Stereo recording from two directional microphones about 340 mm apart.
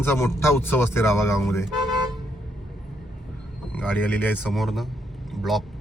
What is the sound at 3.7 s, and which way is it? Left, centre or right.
Speech, centre.